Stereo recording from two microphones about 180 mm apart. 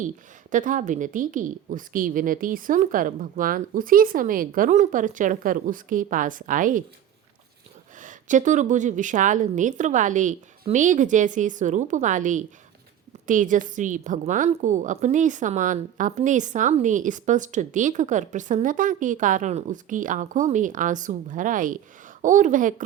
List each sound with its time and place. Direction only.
0.5 s a woman's voice: 45° right (ahead or behind)
7.9 s a woman's voice: 45° right (ahead or behind)